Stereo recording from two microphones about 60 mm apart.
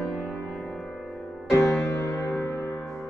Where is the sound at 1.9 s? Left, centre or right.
Left.